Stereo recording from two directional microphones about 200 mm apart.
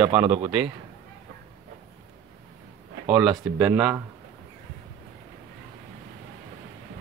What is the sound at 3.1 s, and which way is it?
Speech, 5° right (ahead or behind).